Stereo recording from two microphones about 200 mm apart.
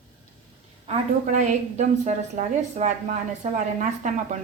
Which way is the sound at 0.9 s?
35° right (ahead or behind).